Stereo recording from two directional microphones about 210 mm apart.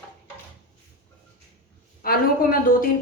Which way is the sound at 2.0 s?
45° left (ahead or behind).